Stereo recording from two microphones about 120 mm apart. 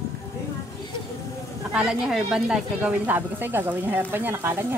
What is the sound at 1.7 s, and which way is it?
Speech, 5° right (ahead or behind).